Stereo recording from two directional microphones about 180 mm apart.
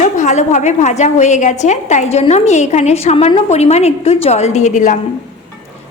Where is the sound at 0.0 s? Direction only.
40° left (ahead or behind).